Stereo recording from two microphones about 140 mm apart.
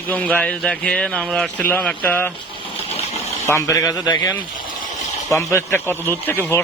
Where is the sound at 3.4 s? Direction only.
20° left (ahead or behind).